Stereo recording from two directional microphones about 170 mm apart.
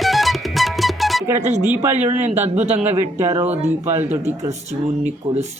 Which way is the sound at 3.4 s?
40° right (ahead or behind).